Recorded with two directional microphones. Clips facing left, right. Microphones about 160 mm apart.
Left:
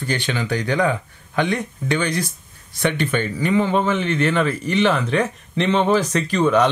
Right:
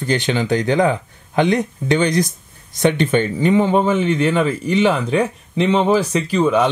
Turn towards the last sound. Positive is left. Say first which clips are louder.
# right 1 dB
turn(degrees=-5)  # may be behind; listen again after turning